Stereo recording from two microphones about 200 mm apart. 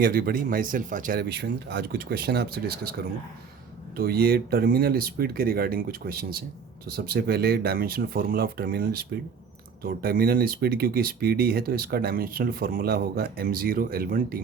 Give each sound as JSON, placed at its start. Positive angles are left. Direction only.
{"t": 0.0, "sound": "speech", "side_deg": -45}
{"t": 3.9, "sound": "speech", "side_deg": -50}